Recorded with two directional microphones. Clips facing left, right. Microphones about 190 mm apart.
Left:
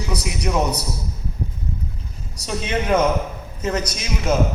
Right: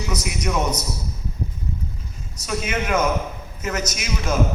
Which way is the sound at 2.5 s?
30° left (ahead or behind).